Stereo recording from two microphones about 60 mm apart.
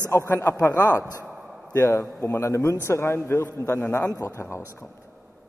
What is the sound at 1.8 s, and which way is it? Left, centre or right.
Speech, left.